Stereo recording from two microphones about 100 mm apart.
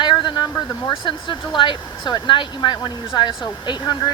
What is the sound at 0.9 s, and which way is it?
Speech, 55° left (ahead or behind).